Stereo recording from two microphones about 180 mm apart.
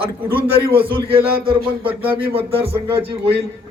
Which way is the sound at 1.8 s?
10° right (ahead or behind).